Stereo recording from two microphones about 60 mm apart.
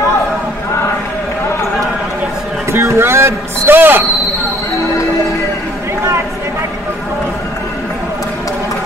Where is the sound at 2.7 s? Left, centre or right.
Right.